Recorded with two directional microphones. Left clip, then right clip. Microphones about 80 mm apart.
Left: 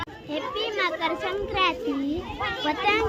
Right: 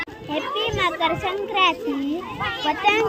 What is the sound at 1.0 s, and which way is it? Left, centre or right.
Speech, left.